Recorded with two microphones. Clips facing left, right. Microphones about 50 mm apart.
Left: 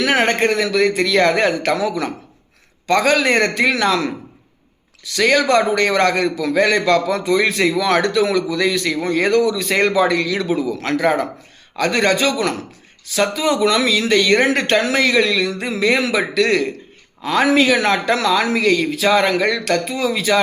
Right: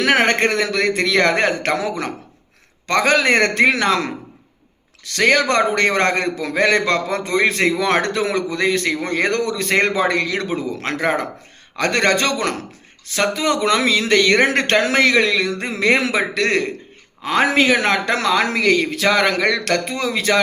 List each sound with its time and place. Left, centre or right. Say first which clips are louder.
0.0 s a man's voice: even; right
11.8 s speech: left 1 dB; right